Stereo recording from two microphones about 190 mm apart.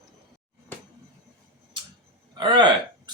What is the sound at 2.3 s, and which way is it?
Speech, 25° right (ahead or behind).